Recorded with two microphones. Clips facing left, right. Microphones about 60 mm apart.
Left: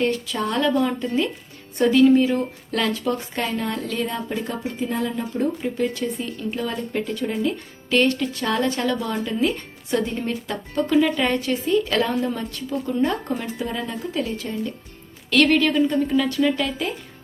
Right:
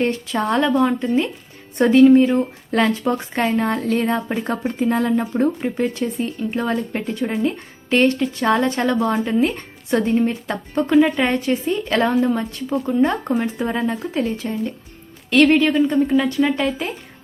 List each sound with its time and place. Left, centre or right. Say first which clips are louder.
0.0 s speech: right 2 dB; right
5.3 s speech: right 4 dB; right